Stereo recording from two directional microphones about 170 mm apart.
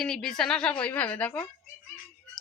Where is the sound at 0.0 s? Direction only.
Centre (ahead or behind).